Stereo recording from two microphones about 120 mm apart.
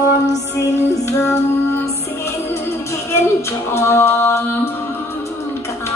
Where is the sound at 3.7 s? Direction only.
20° left (ahead or behind).